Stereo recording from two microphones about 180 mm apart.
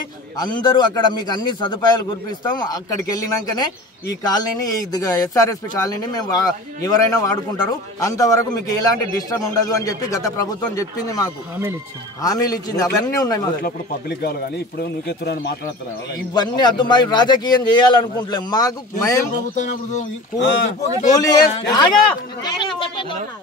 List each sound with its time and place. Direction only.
0.4 s speech: 25° left (ahead or behind)
13.6 s a man's voice: 55° left (ahead or behind)
16.3 s speech: 25° left (ahead or behind)
19.5 s speech: 45° left (ahead or behind)
20.3 s speech: 80° left
21.1 s speech: 20° left (ahead or behind)